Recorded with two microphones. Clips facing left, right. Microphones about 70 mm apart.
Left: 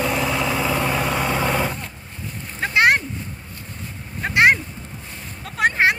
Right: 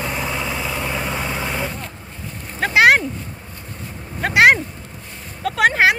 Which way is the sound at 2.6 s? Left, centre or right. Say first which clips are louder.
Right 4 dB; right.